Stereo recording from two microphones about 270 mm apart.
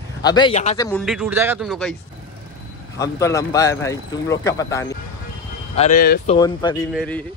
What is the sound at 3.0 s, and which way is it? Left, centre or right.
Speech, centre.